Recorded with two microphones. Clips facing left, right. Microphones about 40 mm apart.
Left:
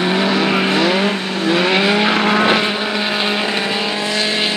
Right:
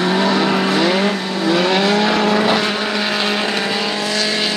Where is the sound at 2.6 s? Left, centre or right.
Centre.